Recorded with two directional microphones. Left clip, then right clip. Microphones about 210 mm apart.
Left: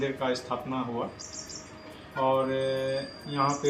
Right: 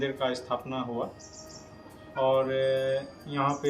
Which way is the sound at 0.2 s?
30° right (ahead or behind).